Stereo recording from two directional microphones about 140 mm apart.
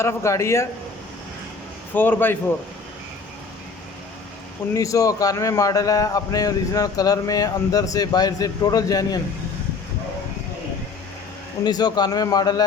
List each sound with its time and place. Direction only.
0.0 s a man's voice: 20° left (ahead or behind)
1.9 s a man's voice: 15° left (ahead or behind)
4.7 s a man's voice: 25° left (ahead or behind)
11.6 s a man's voice: 30° left (ahead or behind)